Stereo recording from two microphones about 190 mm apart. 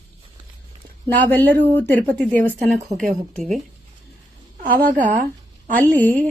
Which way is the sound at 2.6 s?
40° right (ahead or behind).